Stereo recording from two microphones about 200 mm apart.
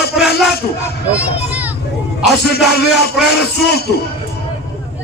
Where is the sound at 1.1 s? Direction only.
5° right (ahead or behind).